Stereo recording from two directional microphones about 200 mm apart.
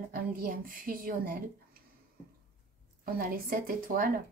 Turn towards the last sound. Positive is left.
turn(degrees=-45)  # may be behind; listen again after turning